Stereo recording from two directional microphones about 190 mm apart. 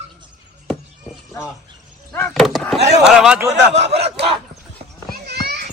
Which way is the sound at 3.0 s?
5° right (ahead or behind).